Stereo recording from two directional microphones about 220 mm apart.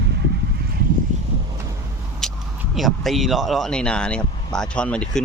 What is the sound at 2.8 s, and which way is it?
Speech, centre (ahead or behind).